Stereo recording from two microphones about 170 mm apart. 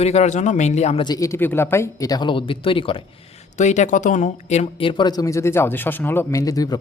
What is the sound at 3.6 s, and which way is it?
Speech, 45° left (ahead or behind).